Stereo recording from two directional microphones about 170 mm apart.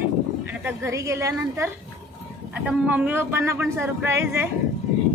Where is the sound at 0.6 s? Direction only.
15° right (ahead or behind).